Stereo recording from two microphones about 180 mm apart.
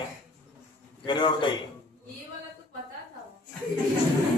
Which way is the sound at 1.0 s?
25° left (ahead or behind).